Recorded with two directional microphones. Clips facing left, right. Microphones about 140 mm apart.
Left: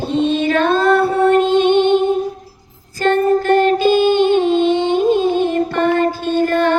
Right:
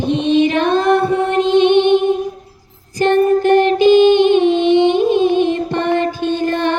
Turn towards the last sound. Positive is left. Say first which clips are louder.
# left 2 dB
turn(degrees=-20)  # may be behind; listen again after turning